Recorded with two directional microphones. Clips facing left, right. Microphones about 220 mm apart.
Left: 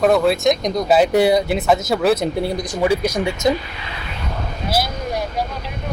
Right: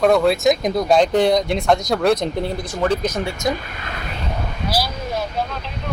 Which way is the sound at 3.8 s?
50° right (ahead or behind).